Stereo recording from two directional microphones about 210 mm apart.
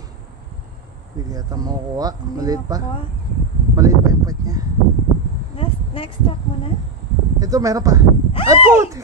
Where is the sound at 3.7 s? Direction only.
15° right (ahead or behind).